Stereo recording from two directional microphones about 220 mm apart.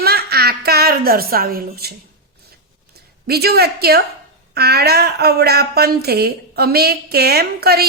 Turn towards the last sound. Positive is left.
turn(degrees=-45)  # may be behind; listen again after turning